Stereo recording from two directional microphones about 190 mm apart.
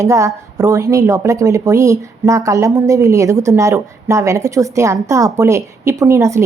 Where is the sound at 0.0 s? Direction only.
15° right (ahead or behind).